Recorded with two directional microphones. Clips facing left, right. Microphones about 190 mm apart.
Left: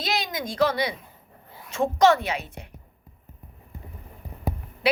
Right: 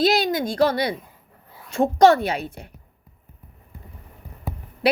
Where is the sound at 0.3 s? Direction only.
35° right (ahead or behind).